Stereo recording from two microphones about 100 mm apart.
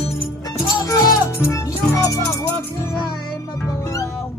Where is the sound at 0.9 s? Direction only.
35° left (ahead or behind).